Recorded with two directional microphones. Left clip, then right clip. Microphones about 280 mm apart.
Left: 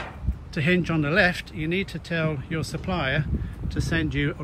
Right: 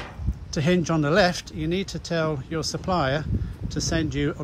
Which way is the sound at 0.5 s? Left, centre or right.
Centre.